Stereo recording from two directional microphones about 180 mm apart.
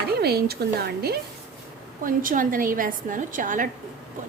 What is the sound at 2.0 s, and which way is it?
A woman's voice, 50° right (ahead or behind).